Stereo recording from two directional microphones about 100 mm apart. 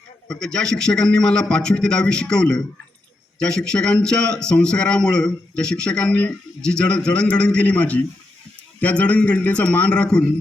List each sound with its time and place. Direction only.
0.3 s a man's voice: 5° left (ahead or behind)